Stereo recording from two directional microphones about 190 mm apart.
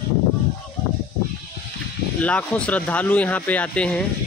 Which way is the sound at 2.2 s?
5° left (ahead or behind).